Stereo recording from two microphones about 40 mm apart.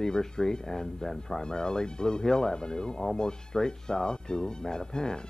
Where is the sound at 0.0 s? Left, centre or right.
Centre.